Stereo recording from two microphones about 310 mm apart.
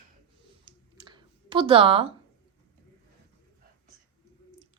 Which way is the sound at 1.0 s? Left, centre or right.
Centre.